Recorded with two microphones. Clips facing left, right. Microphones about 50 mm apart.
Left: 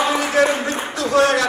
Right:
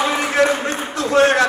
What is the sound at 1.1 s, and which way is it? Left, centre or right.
Speech, right.